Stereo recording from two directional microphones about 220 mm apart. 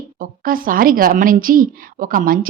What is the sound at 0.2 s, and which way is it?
A woman's voice, 40° right (ahead or behind).